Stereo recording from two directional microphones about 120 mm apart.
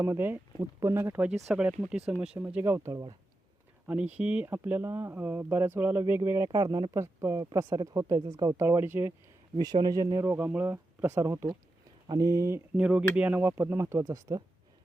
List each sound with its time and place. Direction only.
0.0 s speech: 20° right (ahead or behind)
1.5 s speech: 5° right (ahead or behind); by 3.1 s 30° right (ahead or behind)
3.8 s speech: 10° right (ahead or behind)
9.6 s speech: 35° right (ahead or behind)
12.7 s speech: 10° right (ahead or behind); by 14.4 s 30° right (ahead or behind)